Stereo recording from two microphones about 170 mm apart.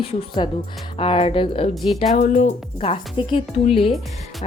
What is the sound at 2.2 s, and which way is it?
Speech, 45° left (ahead or behind).